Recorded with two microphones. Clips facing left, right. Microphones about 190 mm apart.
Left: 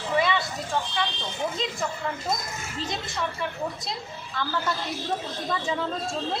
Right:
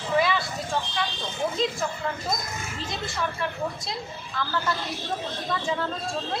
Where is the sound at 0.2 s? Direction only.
Centre (ahead or behind).